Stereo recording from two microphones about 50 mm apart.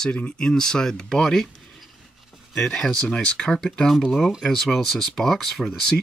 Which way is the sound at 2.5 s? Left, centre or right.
Centre.